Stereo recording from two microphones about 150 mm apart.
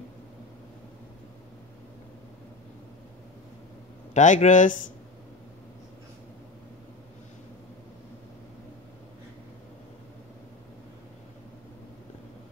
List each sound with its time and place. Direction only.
4.1 s speech: 55° left (ahead or behind)